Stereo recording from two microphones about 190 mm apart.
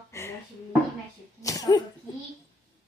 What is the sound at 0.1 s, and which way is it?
Music, 15° left (ahead or behind).